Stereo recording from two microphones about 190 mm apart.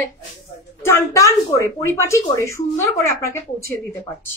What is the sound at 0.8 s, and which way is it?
A woman's voice, 15° left (ahead or behind).